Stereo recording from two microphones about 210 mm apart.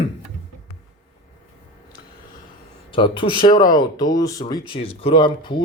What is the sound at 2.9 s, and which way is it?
Speech, 25° left (ahead or behind).